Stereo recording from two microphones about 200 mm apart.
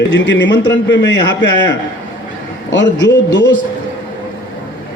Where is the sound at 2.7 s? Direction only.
60° left (ahead or behind).